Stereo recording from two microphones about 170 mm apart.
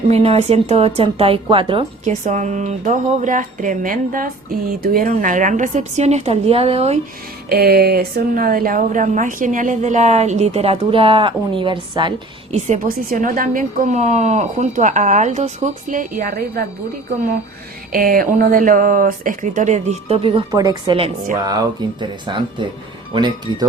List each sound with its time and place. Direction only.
0.1 s a woman's voice: 35° right (ahead or behind)
2.0 s a woman's voice: 45° right (ahead or behind)
7.5 s a woman's voice: 65° right (ahead or behind); by 12.5 s 30° right (ahead or behind)
12.5 s a woman's voice: 45° right (ahead or behind)
17.9 s a woman's voice: 55° right (ahead or behind); by 23.6 s 25° right (ahead or behind)